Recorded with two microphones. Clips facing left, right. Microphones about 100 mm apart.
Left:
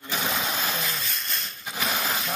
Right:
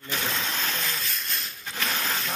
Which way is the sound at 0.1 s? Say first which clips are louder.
Left 2 dB; 10° left (ahead or behind).